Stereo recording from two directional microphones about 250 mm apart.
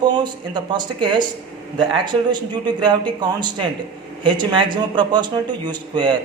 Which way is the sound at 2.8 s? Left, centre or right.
Centre.